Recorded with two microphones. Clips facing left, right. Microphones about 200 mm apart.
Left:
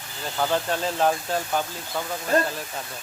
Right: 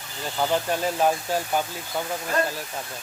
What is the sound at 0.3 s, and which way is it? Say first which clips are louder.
Speech: even; 10° right (ahead or behind).